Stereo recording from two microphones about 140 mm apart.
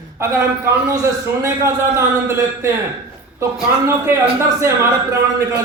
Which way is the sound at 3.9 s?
20° right (ahead or behind).